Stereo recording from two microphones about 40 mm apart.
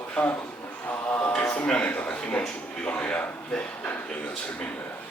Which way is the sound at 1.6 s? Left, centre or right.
Left.